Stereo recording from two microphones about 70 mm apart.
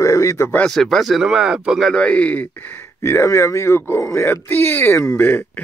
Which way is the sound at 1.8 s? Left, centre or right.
Centre.